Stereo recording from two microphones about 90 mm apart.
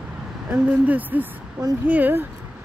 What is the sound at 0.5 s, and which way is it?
Speech, 15° right (ahead or behind).